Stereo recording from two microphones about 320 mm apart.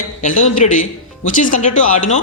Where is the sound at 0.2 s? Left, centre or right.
Left.